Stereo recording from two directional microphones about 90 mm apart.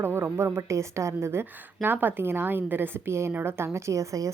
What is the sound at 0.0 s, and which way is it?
A woman's voice, 25° right (ahead or behind).